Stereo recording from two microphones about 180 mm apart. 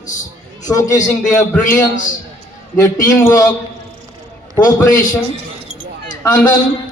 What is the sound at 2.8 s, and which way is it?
Speech, 15° left (ahead or behind).